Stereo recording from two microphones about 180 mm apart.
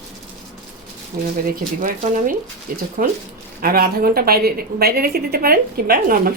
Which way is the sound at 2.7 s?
50° right (ahead or behind).